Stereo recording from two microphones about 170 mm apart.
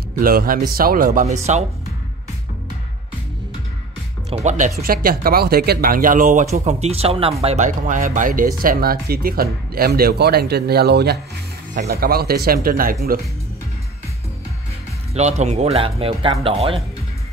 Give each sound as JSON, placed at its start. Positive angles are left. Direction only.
{"t": 0.2, "sound": "speech", "side_deg": -60}
{"t": 1.2, "sound": "speech", "side_deg": -40}
{"t": 4.3, "sound": "speech", "side_deg": -45}
{"t": 4.7, "sound": "speech", "side_deg": -60}
{"t": 15.1, "sound": "speech", "side_deg": -40}